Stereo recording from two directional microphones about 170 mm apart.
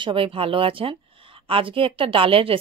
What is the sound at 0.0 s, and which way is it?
Speech, 30° right (ahead or behind).